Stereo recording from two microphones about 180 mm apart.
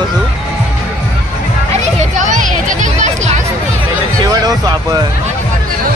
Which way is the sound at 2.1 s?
45° right (ahead or behind).